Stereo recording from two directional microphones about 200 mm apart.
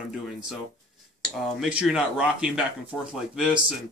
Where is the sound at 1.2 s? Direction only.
5° right (ahead or behind).